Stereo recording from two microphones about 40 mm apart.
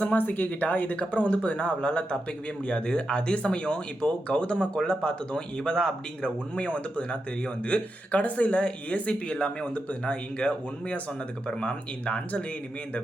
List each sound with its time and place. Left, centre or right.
0.0 s speech: left; by 6.3 s centre
6.6 s speech: left